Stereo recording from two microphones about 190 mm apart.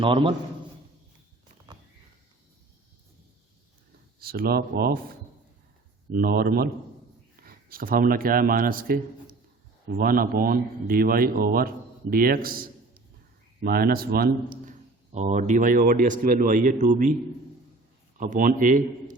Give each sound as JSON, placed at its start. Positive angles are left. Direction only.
{"t": 0.0, "sound": "a man's voice", "side_deg": -25}
{"t": 4.2, "sound": "a man's voice", "side_deg": -50}
{"t": 6.1, "sound": "a man's voice", "side_deg": -50}
{"t": 18.2, "sound": "a man's voice", "side_deg": -45}